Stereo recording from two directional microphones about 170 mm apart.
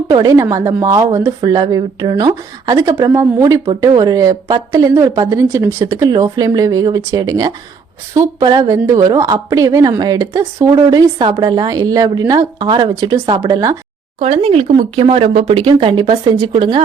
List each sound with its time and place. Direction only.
0.1 s a woman's voice: 20° right (ahead or behind)
14.2 s speech: 35° right (ahead or behind)